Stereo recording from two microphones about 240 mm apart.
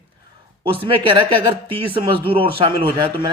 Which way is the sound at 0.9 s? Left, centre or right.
Right.